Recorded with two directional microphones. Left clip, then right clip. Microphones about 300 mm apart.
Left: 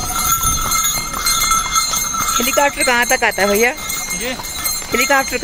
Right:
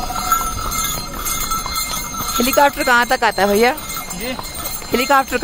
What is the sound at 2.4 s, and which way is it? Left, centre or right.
Speech, centre.